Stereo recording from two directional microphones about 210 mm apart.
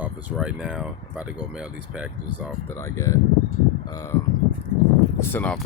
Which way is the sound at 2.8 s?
15° left (ahead or behind).